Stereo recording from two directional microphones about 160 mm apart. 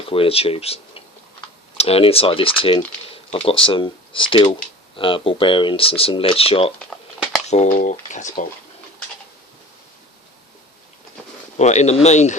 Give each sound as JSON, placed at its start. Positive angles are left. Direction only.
{"t": 0.1, "sound": "speech", "side_deg": 35}
{"t": 6.7, "sound": "a sound", "side_deg": 0}
{"t": 7.5, "sound": "speech", "side_deg": 50}
{"t": 11.5, "sound": "speech", "side_deg": 45}